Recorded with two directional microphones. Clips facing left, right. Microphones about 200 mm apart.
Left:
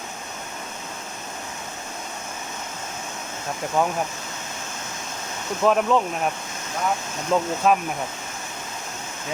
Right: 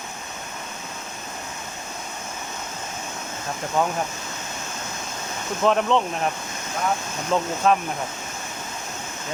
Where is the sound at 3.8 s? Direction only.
10° left (ahead or behind).